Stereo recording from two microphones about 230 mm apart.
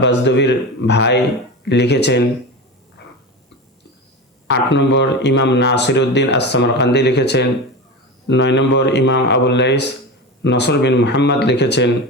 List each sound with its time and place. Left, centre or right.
0.0 s speech: left
4.4 s speech: left